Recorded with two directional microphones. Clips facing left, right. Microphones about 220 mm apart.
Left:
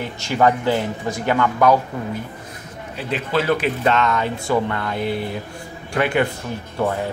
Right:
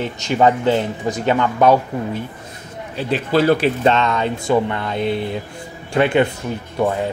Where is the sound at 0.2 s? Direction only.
20° right (ahead or behind).